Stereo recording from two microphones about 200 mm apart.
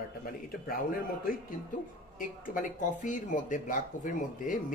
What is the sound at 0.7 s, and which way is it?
Speech, 45° left (ahead or behind).